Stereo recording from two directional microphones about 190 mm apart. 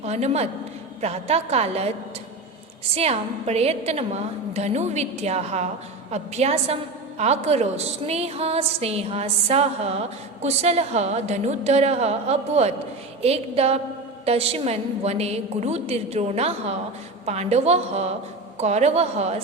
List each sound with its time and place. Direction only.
0.0 s a woman's voice: 35° right (ahead or behind)
2.9 s a woman's voice: 35° right (ahead or behind)